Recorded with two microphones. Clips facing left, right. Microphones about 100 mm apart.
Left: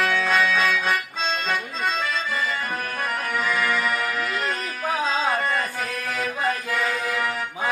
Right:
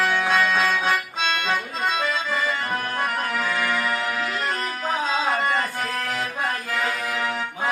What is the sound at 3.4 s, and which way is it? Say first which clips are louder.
Music: left 3 dB; 20° right (ahead or behind).